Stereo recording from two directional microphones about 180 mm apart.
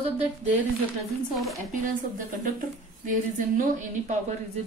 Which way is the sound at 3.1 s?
45° right (ahead or behind).